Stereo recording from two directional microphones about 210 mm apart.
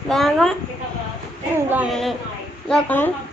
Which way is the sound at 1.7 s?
5° right (ahead or behind).